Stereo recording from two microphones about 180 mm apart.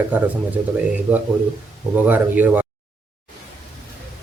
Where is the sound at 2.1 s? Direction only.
10° right (ahead or behind).